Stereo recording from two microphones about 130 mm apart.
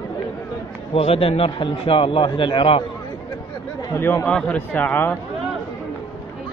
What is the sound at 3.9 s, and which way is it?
Speech, 20° left (ahead or behind).